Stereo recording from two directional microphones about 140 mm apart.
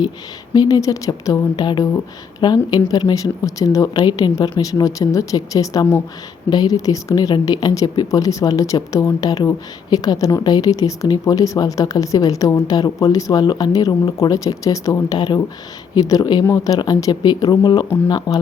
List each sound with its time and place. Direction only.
0.5 s speech: 25° left (ahead or behind)